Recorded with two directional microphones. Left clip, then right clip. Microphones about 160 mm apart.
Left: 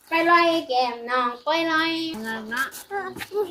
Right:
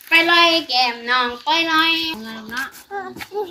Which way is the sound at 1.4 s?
90° left.